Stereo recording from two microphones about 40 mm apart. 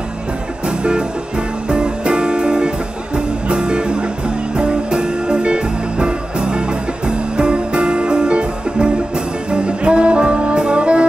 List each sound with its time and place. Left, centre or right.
0.7 s music: right